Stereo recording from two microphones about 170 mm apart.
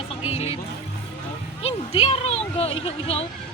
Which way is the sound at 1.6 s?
35° left (ahead or behind).